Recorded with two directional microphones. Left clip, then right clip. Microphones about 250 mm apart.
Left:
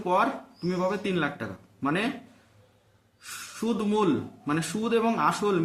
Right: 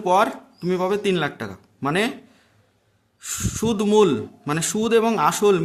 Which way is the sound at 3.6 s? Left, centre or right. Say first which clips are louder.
Right 9 dB; right.